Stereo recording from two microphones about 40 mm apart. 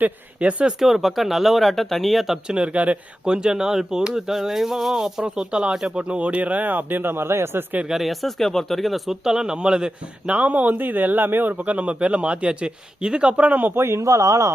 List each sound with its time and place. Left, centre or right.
0.3 s a man's voice: right
0.8 s speech: centre
2.5 s a man's voice: right
3.2 s speech: centre
5.2 s a man's voice: right
7.9 s speech: centre
9.2 s a man's voice: centre
10.3 s speech: right
11.5 s a man's voice: right
13.7 s speech: right